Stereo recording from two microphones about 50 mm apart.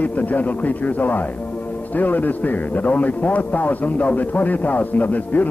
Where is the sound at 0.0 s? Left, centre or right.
Left.